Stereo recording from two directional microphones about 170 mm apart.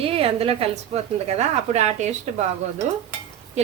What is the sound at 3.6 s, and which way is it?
Speech, 40° right (ahead or behind).